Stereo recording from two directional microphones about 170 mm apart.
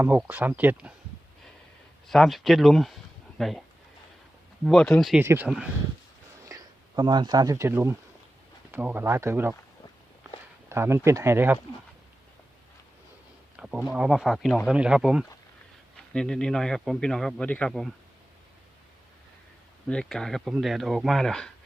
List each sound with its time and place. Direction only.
0.0 s speech: 10° right (ahead or behind)
2.0 s speech: centre (ahead or behind)
4.6 s a man's voice: 5° left (ahead or behind)
5.2 s speech: 15° right (ahead or behind)
6.4 s a sound: 20° right (ahead or behind)
7.7 s speech: 15° right (ahead or behind)
10.7 s speech: 15° right (ahead or behind)
13.6 s bee: 5° right (ahead or behind)
13.8 s a man's voice: 5° right (ahead or behind)
19.9 s a man's voice: 5° left (ahead or behind)